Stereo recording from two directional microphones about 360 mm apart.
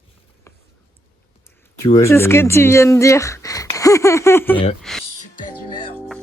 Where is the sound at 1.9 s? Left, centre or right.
Centre.